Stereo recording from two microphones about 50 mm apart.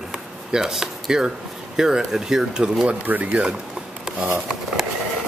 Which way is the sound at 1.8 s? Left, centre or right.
Centre.